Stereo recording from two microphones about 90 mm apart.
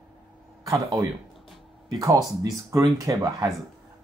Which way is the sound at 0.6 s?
40° right (ahead or behind).